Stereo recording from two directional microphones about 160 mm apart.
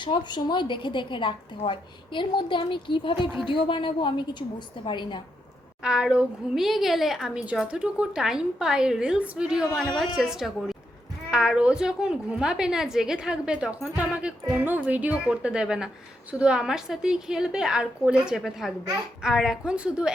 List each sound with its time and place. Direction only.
0.0 s a woman's voice: 30° left (ahead or behind)
5.8 s a woman's voice: 5° right (ahead or behind)